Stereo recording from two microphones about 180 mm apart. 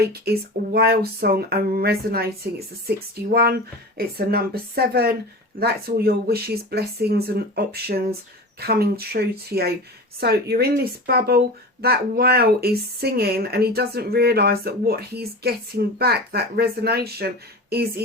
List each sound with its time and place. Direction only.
0.1 s speech: 60° right (ahead or behind)